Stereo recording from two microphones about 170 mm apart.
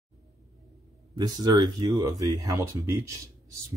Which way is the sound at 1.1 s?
25° right (ahead or behind).